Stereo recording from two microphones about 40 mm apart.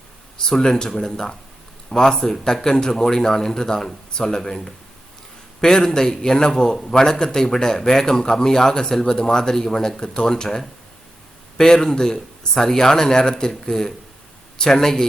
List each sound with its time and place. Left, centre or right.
0.6 s a man's voice: centre